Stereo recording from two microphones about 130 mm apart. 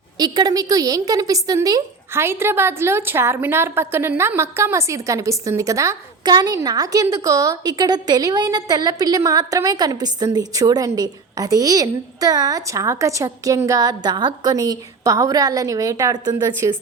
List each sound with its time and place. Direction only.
0.2 s a woman's voice: 30° right (ahead or behind)